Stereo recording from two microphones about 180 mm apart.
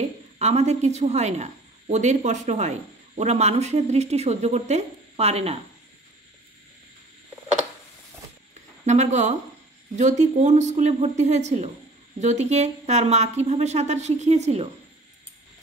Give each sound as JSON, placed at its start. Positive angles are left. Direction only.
{"t": 0.4, "sound": "a woman's voice", "side_deg": -35}
{"t": 8.8, "sound": "a woman's voice", "side_deg": -40}